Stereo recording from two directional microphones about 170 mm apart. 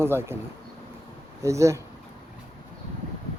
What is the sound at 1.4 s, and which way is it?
Speech, 15° right (ahead or behind).